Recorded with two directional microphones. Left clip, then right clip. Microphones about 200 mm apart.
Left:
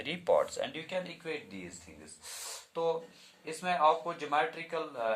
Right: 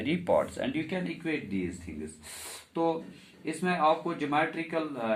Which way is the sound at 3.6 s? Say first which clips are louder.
Right 1 dB; 55° left (ahead or behind).